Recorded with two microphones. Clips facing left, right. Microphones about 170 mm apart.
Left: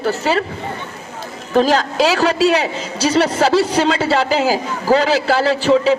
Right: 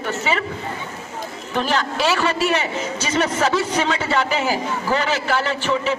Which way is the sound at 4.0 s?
90° left.